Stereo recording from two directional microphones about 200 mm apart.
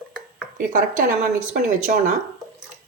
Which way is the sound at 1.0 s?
50° right (ahead or behind).